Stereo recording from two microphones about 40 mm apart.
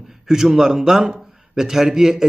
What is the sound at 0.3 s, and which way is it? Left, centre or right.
A man's voice, centre.